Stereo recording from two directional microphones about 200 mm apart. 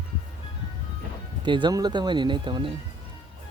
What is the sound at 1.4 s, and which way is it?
Speech, 25° right (ahead or behind).